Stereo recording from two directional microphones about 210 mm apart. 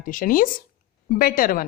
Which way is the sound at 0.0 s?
40° left (ahead or behind).